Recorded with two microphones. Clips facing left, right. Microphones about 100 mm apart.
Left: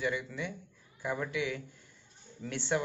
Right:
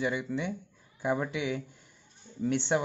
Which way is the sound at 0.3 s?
20° right (ahead or behind).